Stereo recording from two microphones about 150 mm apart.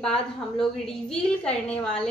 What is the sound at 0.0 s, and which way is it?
A woman's voice, 5° left (ahead or behind).